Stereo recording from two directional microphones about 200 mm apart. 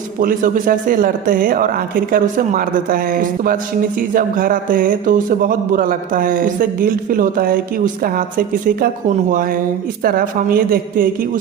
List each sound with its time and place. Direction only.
0.2 s a man's voice: 40° right (ahead or behind)